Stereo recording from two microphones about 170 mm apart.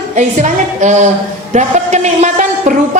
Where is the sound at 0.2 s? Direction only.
45° right (ahead or behind).